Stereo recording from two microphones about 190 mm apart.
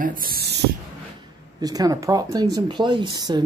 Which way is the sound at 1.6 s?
20° right (ahead or behind).